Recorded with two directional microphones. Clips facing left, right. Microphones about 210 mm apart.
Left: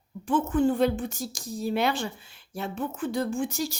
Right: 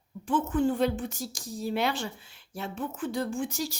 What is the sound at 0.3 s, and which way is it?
Speech, 50° left (ahead or behind).